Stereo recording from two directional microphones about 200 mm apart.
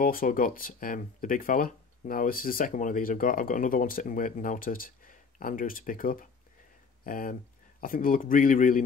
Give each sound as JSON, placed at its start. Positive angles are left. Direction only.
{"t": 0.0, "sound": "speech", "side_deg": 45}